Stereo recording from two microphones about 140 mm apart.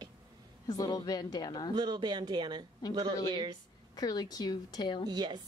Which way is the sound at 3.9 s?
30° left (ahead or behind).